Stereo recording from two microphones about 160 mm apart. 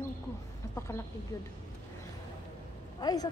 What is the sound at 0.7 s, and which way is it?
Speech, 15° left (ahead or behind).